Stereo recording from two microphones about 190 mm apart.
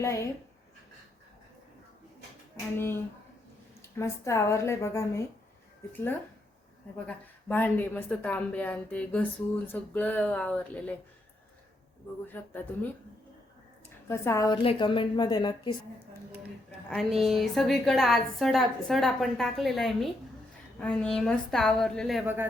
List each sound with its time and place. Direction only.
0.0 s a woman's voice: 15° left (ahead or behind)
2.7 s a woman's voice: 10° left (ahead or behind)
7.1 s a woman's voice: 10° left (ahead or behind)
12.2 s a woman's voice: 10° left (ahead or behind)
14.1 s a woman's voice: 15° left (ahead or behind)
16.9 s a woman's voice: centre (ahead or behind)